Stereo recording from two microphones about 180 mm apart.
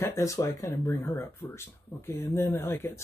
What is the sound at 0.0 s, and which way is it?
Speech, 15° left (ahead or behind).